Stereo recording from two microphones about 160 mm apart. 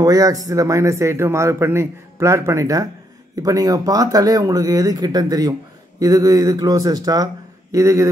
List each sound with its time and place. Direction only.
0.0 s speech: 20° right (ahead or behind)